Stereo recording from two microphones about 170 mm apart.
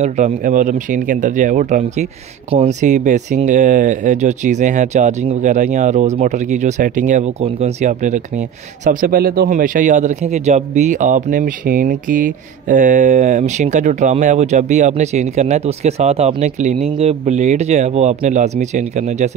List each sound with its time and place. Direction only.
0.0 s a man's voice: 45° right (ahead or behind)
9.1 s a man's voice: 65° right (ahead or behind); by 19.3 s 40° right (ahead or behind)